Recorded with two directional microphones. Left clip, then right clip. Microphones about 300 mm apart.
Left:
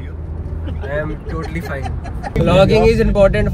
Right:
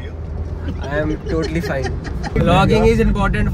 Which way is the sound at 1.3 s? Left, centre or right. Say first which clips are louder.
Right 5 dB; centre.